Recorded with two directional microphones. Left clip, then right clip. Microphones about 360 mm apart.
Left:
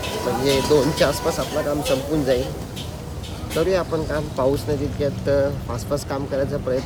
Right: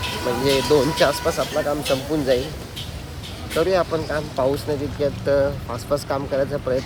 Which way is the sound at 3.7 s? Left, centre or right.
Centre.